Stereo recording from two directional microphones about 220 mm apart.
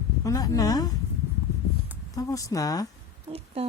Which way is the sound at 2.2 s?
15° left (ahead or behind).